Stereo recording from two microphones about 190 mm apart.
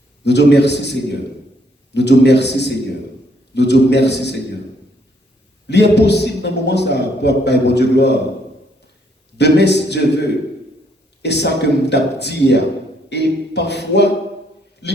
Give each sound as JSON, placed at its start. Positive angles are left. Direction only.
{"t": 0.3, "sound": "a man's voice", "side_deg": 65}
{"t": 5.6, "sound": "a man's voice", "side_deg": 65}
{"t": 9.4, "sound": "a man's voice", "side_deg": 65}
{"t": 13.1, "sound": "a sound", "side_deg": 65}
{"t": 14.8, "sound": "a man's voice", "side_deg": 65}